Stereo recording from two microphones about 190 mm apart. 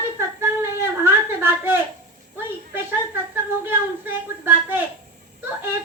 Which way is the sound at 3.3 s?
10° right (ahead or behind).